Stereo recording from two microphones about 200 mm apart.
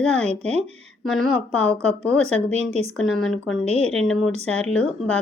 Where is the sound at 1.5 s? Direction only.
5° left (ahead or behind).